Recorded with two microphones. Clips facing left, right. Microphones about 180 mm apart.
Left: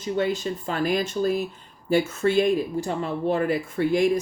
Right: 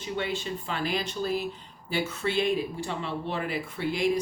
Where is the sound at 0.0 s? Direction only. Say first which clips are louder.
Left 7 dB; 40° left (ahead or behind).